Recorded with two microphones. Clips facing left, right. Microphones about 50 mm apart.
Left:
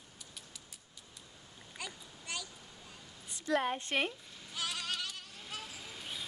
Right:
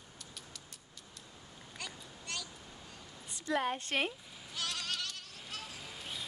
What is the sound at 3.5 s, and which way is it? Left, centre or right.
Bleat, centre.